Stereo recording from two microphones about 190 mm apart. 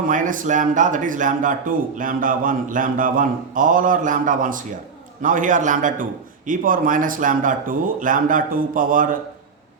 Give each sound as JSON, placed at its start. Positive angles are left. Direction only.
{"t": 0.1, "sound": "speech", "side_deg": -45}